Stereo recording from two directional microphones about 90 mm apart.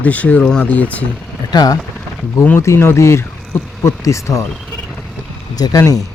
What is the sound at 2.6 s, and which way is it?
Speech, 30° left (ahead or behind).